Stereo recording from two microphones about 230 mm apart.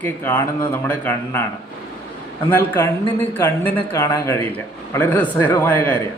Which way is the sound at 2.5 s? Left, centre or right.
Centre.